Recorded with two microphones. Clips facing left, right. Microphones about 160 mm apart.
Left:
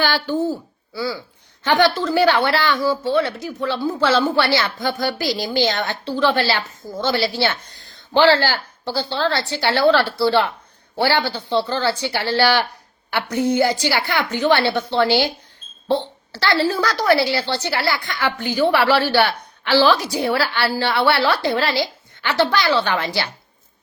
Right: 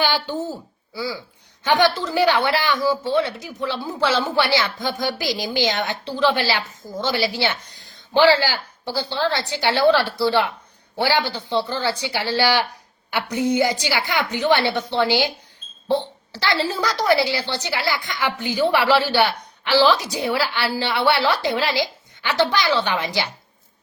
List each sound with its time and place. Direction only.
0.0 s speech: 20° right (ahead or behind)
2.0 s a woman's voice: 15° right (ahead or behind)
16.3 s a woman's voice: 15° right (ahead or behind)